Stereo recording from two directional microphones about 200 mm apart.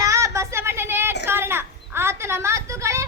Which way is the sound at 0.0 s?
15° right (ahead or behind).